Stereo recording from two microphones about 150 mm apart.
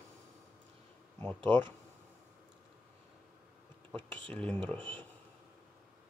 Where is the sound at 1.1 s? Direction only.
10° left (ahead or behind).